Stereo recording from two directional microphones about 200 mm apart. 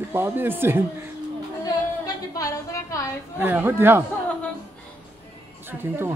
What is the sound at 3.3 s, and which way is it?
Speech, 10° right (ahead or behind).